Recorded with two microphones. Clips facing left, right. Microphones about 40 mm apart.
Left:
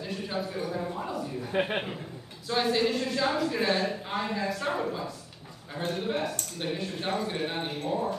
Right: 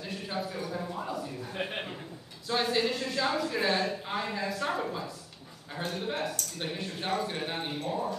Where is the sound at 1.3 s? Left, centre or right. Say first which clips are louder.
Left 6 dB; left.